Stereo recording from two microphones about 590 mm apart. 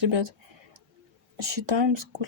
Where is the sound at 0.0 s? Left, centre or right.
Right.